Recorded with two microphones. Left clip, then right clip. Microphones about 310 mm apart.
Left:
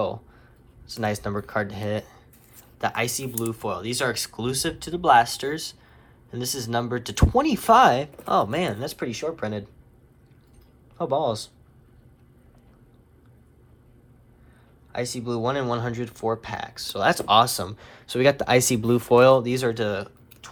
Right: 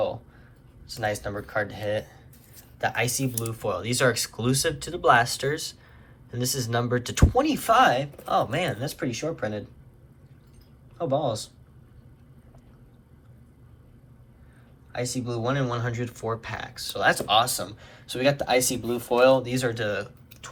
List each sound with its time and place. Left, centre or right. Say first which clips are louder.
0.9 s speech: left 1 dB; centre
11.1 s speech: left 2 dB; centre
14.9 s speech: left 2 dB; centre